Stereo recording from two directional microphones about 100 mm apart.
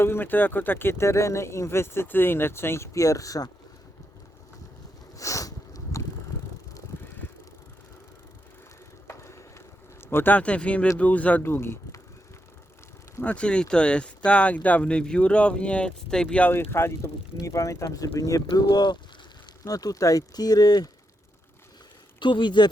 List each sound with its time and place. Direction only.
0.0 s speech: 20° left (ahead or behind)
5.1 s sniff: 35° left (ahead or behind)
9.0 s a sound: 30° left (ahead or behind)
10.1 s speech: 20° left (ahead or behind)
13.2 s speech: 10° left (ahead or behind); by 18.4 s 35° left (ahead or behind)
18.6 s speech: 50° left (ahead or behind)
19.6 s speech: 35° left (ahead or behind)
22.2 s speech: 50° left (ahead or behind)